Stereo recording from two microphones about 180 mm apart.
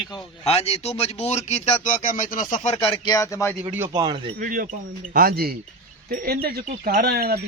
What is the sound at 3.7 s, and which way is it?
Speech, 15° right (ahead or behind).